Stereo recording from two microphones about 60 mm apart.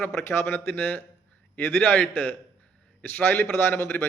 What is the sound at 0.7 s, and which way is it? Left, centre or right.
A man's voice, left.